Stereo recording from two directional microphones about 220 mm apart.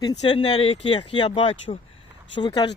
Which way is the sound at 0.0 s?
20° left (ahead or behind).